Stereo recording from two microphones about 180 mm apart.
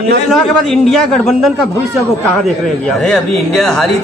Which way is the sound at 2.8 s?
Centre (ahead or behind).